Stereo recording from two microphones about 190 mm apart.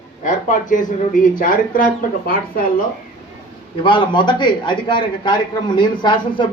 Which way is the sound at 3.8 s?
25° left (ahead or behind).